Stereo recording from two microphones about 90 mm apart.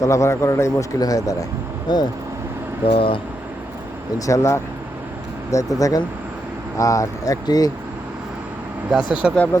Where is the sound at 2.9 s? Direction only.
85° left.